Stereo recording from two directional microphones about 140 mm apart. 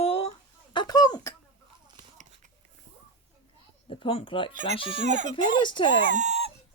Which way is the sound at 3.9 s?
40° left (ahead or behind).